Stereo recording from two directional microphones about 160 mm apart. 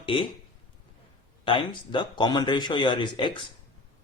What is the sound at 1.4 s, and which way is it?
Speech, 30° left (ahead or behind).